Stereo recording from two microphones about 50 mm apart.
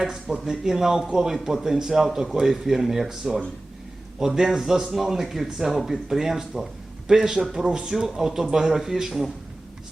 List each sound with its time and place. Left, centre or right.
0.0 s a man's voice: centre